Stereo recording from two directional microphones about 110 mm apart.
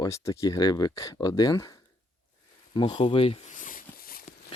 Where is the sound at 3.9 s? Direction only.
20° left (ahead or behind).